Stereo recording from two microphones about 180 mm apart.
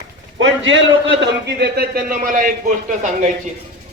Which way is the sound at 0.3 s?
90° right.